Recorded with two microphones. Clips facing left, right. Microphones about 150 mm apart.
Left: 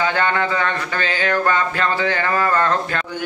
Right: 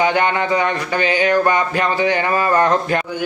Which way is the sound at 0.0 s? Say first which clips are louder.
Right 3 dB; 15° right (ahead or behind).